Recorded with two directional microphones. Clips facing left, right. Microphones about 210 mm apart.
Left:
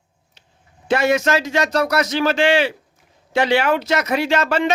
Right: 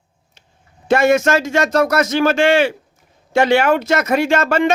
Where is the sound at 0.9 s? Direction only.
50° right (ahead or behind).